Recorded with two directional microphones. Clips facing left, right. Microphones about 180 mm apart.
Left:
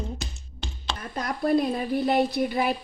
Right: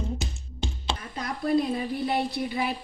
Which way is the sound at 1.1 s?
50° left (ahead or behind).